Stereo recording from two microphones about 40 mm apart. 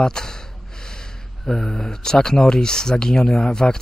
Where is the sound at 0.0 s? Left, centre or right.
Centre.